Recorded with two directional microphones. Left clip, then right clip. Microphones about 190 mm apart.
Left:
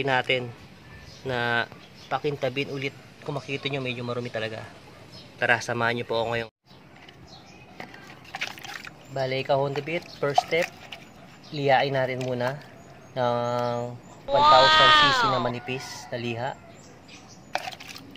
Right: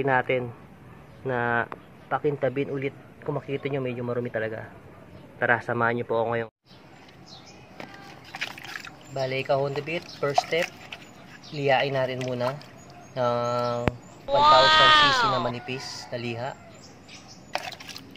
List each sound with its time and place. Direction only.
0.0 s speech: 10° left (ahead or behind)
8.3 s speech: 15° left (ahead or behind)
14.2 s speech: centre (ahead or behind)
15.5 s speech: 25° left (ahead or behind)
17.5 s a sound: 5° left (ahead or behind)